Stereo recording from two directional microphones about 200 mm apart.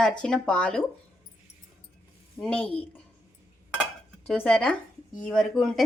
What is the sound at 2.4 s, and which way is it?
Speech, centre (ahead or behind).